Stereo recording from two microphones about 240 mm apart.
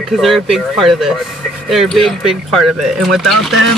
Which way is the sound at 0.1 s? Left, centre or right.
Centre.